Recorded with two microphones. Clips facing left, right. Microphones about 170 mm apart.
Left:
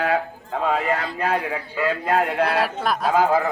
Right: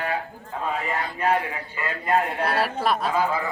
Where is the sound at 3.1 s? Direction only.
60° left (ahead or behind).